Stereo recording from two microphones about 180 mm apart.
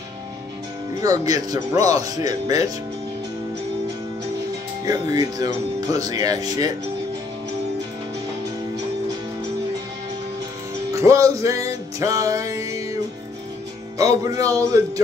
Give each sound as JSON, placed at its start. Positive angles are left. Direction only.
{"t": 1.0, "sound": "speech", "side_deg": -20}
{"t": 4.8, "sound": "speech", "side_deg": -20}
{"t": 10.9, "sound": "music", "side_deg": -15}
{"t": 13.9, "sound": "speech", "side_deg": -20}